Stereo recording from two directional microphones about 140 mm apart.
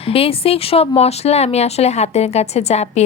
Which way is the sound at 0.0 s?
45° left (ahead or behind).